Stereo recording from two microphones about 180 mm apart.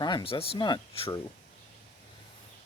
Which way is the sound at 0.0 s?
25° left (ahead or behind).